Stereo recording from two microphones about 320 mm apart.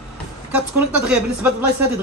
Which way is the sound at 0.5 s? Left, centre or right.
Centre.